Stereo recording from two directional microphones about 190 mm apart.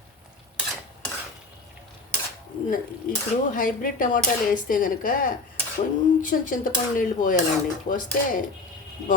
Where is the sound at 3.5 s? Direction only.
45° left (ahead or behind).